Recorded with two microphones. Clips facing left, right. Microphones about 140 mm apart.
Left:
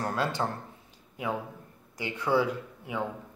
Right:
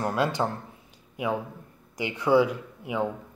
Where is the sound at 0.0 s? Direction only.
15° right (ahead or behind).